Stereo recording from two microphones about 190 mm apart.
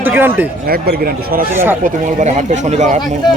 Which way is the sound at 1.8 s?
40° right (ahead or behind).